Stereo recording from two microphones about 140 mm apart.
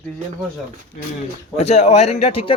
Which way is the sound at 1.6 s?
50° left (ahead or behind).